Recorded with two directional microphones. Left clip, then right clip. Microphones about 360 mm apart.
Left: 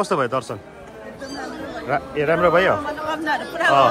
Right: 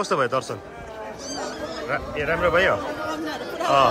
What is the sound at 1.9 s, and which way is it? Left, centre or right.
A man's voice, centre.